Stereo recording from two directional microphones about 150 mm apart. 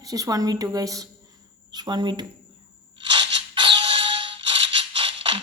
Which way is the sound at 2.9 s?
35° right (ahead or behind).